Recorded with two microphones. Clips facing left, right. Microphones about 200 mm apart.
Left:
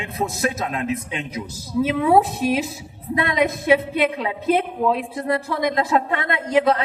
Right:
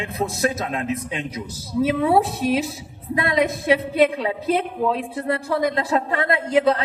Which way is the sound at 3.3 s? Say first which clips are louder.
Left 1 dB; 35° right (ahead or behind).